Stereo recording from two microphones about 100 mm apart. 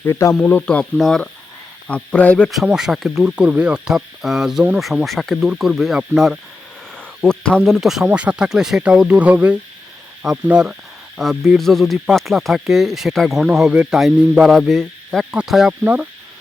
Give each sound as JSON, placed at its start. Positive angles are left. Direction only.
{"t": 0.0, "sound": "speech", "side_deg": 30}
{"t": 0.4, "sound": "speech", "side_deg": 15}
{"t": 2.6, "sound": "speech", "side_deg": -5}
{"t": 7.2, "sound": "speech", "side_deg": 10}
{"t": 15.8, "sound": "speech", "side_deg": -15}